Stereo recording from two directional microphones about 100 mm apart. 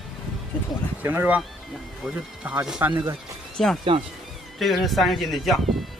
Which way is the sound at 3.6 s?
Centre (ahead or behind).